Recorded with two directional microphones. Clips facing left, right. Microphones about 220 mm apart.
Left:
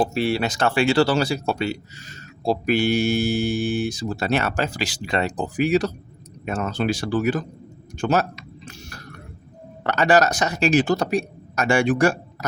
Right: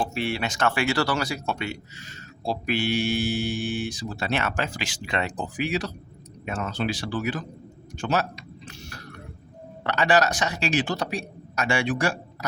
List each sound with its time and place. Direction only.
0.0 s speech: 35° left (ahead or behind)
7.9 s a sound: 45° left (ahead or behind)
9.8 s speech: 45° left (ahead or behind)